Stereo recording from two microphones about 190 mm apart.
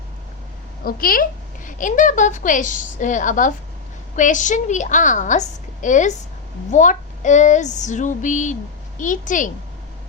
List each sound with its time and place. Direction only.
0.9 s a woman's voice: 50° left (ahead or behind)